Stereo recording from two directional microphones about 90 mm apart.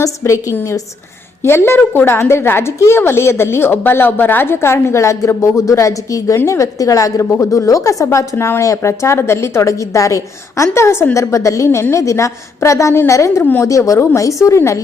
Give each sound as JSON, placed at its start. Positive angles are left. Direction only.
{"t": 1.5, "sound": "a woman's voice", "side_deg": 25}
{"t": 13.4, "sound": "a woman's voice", "side_deg": 20}
{"t": 13.7, "sound": "a woman's voice", "side_deg": 35}